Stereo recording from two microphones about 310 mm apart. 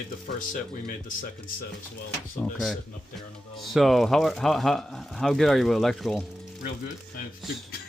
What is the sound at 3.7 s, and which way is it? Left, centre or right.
Speech, centre.